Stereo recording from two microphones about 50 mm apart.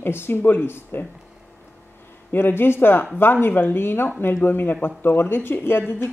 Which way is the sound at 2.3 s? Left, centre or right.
Left.